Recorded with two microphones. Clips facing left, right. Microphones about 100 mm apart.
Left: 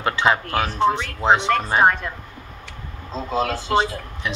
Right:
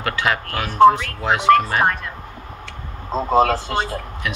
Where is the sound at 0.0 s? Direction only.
25° left (ahead or behind).